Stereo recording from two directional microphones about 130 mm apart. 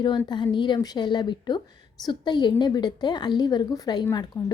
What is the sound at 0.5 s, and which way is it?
A woman's voice, 35° left (ahead or behind).